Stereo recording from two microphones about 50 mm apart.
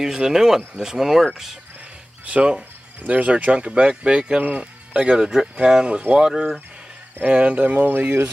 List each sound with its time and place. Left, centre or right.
0.0 s speech: centre
2.2 s speech: right
7.2 s speech: right